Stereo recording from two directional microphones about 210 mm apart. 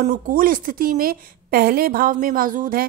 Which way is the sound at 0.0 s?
40° right (ahead or behind).